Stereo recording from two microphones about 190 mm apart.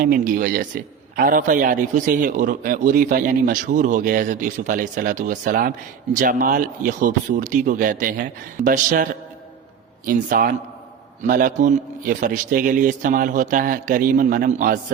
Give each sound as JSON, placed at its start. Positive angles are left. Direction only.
{"t": 0.0, "sound": "a man's voice", "side_deg": -45}
{"t": 10.1, "sound": "a man's voice", "side_deg": -45}